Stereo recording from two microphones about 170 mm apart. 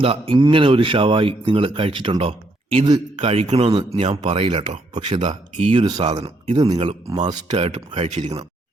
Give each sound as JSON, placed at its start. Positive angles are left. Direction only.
{"t": 0.0, "sound": "speech", "side_deg": -30}
{"t": 5.8, "sound": "speech", "side_deg": -25}
{"t": 6.1, "sound": "speech", "side_deg": -35}